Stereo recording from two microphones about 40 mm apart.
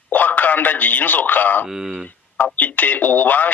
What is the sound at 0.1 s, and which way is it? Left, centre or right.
A man's voice, left.